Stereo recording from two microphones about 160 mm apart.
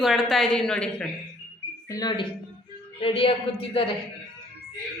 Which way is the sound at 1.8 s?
25° left (ahead or behind).